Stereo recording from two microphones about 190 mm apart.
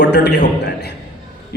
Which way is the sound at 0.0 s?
60° left (ahead or behind).